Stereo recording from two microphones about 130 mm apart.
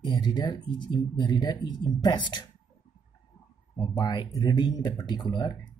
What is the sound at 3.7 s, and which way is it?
Speech, 35° left (ahead or behind).